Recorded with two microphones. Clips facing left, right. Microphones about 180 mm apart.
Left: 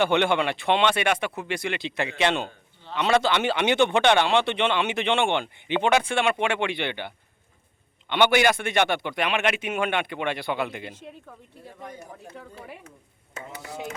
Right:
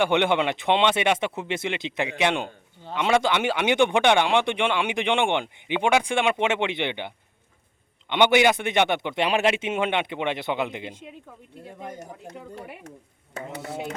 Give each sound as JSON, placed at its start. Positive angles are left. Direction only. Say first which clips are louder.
{"t": 0.0, "sound": "speech", "louder": "right 1 dB", "side_deg": -15}
{"t": 8.1, "sound": "speech", "louder": "right 1 dB", "side_deg": -20}